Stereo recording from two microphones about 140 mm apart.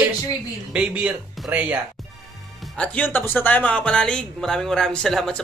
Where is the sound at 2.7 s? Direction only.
10° left (ahead or behind).